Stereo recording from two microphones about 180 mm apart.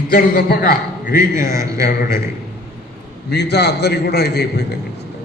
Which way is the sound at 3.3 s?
65° left (ahead or behind).